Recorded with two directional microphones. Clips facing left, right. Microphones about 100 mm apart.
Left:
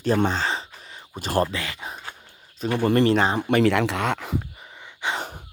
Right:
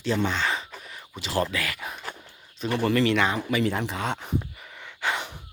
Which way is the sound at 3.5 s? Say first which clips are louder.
Left 6 dB; 75° left (ahead or behind).